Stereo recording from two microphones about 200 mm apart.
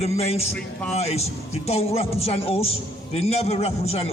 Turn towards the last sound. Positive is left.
turn(degrees=30)  # may be behind; listen again after turning